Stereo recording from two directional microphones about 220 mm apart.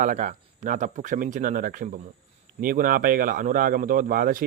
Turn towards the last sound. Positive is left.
turn(degrees=-40)  # may be behind; listen again after turning